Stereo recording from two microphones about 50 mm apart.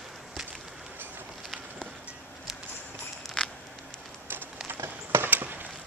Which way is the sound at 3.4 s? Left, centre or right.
Centre.